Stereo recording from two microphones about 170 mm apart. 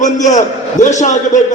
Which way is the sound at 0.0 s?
45° left (ahead or behind).